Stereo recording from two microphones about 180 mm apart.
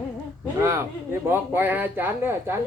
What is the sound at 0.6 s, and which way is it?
Speech, 15° right (ahead or behind).